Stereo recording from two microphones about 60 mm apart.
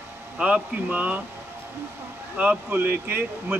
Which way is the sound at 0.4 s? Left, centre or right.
Right.